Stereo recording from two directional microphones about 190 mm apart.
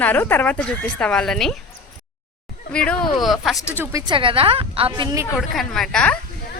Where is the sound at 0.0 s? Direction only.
10° left (ahead or behind).